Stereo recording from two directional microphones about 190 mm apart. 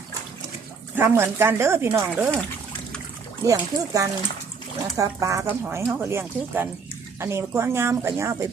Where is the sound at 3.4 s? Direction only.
15° right (ahead or behind).